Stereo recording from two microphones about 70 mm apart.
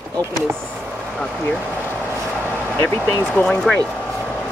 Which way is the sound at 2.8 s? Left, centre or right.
Left.